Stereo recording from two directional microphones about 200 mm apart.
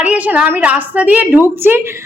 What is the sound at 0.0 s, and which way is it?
A woman's voice, 5° right (ahead or behind).